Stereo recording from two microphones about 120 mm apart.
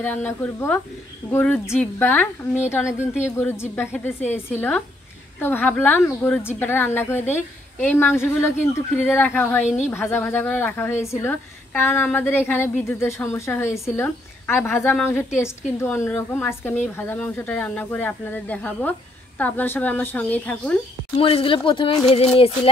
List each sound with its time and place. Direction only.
0.0 s a woman's voice: 15° left (ahead or behind)
21.2 s speech: 50° left (ahead or behind)